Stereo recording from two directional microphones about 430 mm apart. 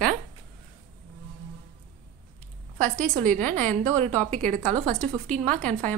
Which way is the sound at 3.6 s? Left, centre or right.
Centre.